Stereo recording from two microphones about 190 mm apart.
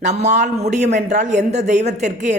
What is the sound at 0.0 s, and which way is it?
Speech, 35° right (ahead or behind).